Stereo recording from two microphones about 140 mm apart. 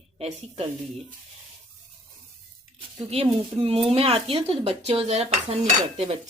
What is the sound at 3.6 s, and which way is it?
Speech, 45° right (ahead or behind).